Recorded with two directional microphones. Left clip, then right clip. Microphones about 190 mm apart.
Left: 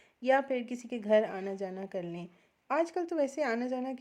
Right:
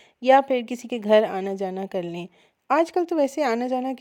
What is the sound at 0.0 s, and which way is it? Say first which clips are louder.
A woman's voice: right 11 dB; 45° right (ahead or behind).